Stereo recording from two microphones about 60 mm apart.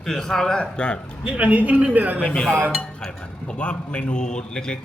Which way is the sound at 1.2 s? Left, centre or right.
Right.